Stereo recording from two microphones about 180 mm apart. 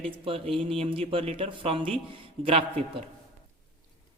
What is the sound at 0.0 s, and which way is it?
Speech, 30° right (ahead or behind).